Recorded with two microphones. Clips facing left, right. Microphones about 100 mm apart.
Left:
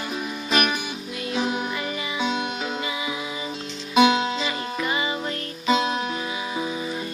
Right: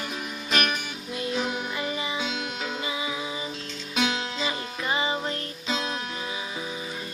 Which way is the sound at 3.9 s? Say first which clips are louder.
Left 10 dB; 15° left (ahead or behind).